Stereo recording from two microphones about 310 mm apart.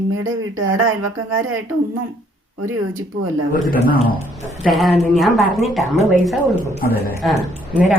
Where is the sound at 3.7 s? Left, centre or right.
Left.